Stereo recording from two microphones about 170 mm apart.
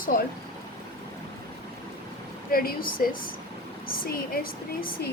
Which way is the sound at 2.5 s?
60° left (ahead or behind).